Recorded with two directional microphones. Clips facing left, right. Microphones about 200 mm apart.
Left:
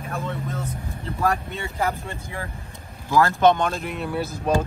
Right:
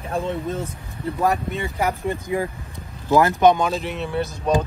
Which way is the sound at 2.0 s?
15° right (ahead or behind).